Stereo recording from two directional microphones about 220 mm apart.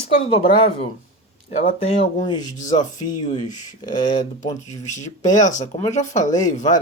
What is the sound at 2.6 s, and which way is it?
Speech, 35° left (ahead or behind).